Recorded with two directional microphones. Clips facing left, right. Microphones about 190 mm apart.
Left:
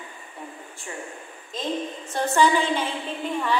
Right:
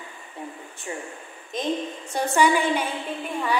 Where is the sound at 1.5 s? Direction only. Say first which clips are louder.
Right 2 dB; 20° right (ahead or behind).